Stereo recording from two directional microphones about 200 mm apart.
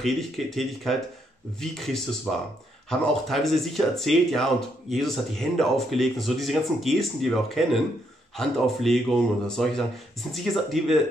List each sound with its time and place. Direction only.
0.0 s speech: centre (ahead or behind)
2.3 s speech: centre (ahead or behind)